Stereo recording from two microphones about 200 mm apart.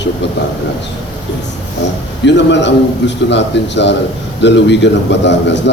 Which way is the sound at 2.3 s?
60° left (ahead or behind).